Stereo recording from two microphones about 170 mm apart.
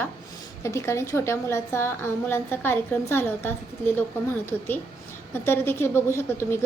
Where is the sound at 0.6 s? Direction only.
15° left (ahead or behind).